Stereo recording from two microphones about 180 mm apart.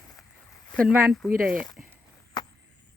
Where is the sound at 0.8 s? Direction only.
5° right (ahead or behind).